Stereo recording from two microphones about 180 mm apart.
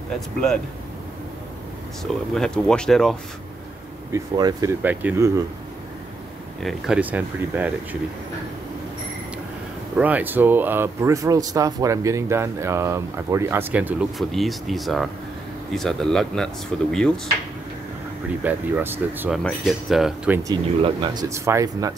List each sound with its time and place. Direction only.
2.3 s speech: 5° left (ahead or behind)
4.1 s speech: 20° right (ahead or behind)
6.6 s speech: 5° right (ahead or behind)
9.9 s speech: 10° right (ahead or behind)
18.4 s speech: 10° right (ahead or behind)
20.4 s speech: 25° right (ahead or behind)